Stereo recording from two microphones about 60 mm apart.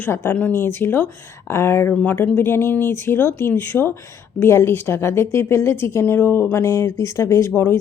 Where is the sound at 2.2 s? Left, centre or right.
Left.